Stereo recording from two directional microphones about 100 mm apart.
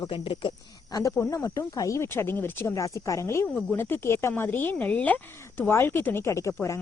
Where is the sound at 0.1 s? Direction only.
60° left (ahead or behind).